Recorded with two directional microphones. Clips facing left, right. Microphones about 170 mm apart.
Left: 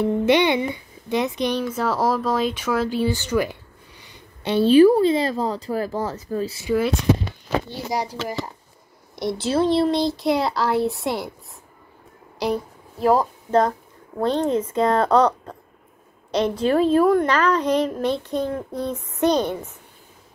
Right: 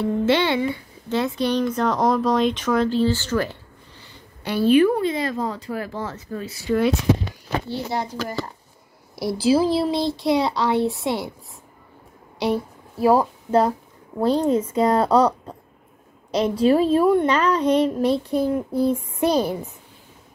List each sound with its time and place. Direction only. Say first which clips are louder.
0.0 s a child's voice: left 2 dB; 15° left (ahead or behind); by 6.6 s 35° left (ahead or behind)
6.7 s speech: right 2 dB; centre (ahead or behind)
7.9 s a child's voice: left 4 dB; 10° left (ahead or behind)
9.1 s speech: right 3 dB; 5° right (ahead or behind)
12.4 s a woman's voice: right 1 dB; centre (ahead or behind)
17.0 s speech: even; 5° right (ahead or behind)
17.3 s a child's voice: right 1 dB; 30° right (ahead or behind)
18.3 s a child's voice: right 4 dB; 10° right (ahead or behind)